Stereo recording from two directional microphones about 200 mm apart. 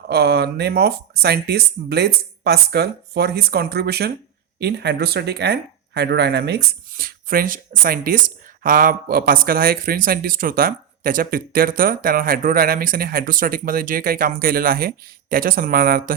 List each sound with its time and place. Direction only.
0.1 s a man's voice: 55° right (ahead or behind)